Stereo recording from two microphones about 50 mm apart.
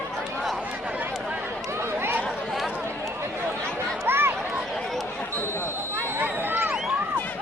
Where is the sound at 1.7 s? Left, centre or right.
Right.